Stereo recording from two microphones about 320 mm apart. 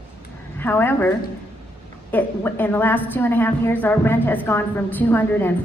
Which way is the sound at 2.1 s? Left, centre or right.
Centre.